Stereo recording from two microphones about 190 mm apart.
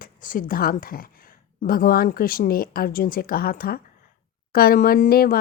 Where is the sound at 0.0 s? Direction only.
45° left (ahead or behind).